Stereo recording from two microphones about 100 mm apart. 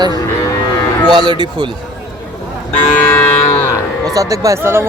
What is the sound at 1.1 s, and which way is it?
Speech, 45° right (ahead or behind).